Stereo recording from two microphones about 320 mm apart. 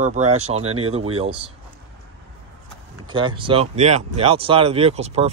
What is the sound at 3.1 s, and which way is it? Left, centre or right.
Speech, centre.